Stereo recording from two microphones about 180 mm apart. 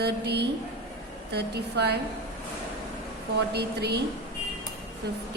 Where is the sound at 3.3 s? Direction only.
65° right (ahead or behind).